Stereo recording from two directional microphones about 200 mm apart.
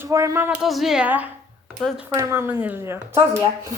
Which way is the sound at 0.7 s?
Centre (ahead or behind).